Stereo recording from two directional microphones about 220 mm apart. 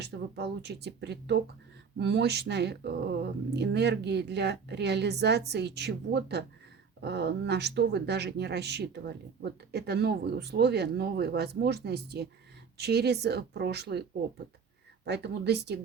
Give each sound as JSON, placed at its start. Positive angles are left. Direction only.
{"t": 0.0, "sound": "speech", "side_deg": -50}
{"t": 15.0, "sound": "speech", "side_deg": -50}